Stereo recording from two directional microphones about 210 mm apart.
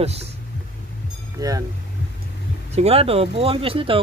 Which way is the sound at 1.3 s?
15° right (ahead or behind).